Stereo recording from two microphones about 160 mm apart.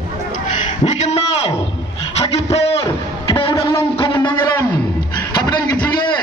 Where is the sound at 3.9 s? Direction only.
30° left (ahead or behind).